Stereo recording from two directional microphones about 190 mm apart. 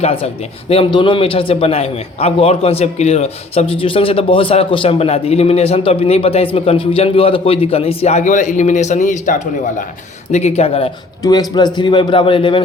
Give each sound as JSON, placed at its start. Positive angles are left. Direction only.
{"t": 0.0, "sound": "a man's voice", "side_deg": 30}